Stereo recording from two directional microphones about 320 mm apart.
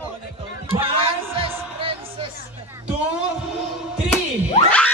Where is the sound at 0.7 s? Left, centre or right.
Centre.